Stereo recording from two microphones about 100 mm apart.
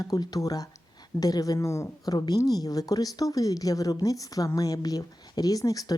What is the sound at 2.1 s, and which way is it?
A woman's voice, 40° left (ahead or behind).